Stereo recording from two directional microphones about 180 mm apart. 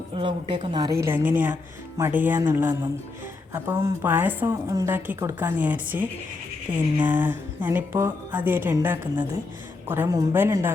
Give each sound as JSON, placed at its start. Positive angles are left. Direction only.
{"t": 0.2, "sound": "speech", "side_deg": -30}
{"t": 1.0, "sound": "a woman's voice", "side_deg": -10}
{"t": 6.7, "sound": "speech", "side_deg": -25}
{"t": 7.0, "sound": "a woman's voice", "side_deg": -10}